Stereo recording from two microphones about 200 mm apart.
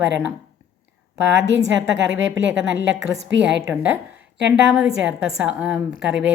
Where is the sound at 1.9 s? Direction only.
70° right (ahead or behind).